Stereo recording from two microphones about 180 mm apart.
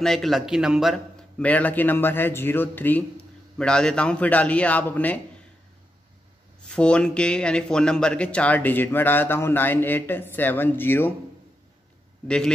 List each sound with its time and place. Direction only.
0.0 s speech: centre (ahead or behind)
6.7 s speech: 5° left (ahead or behind)
12.3 s a man's voice: 5° left (ahead or behind)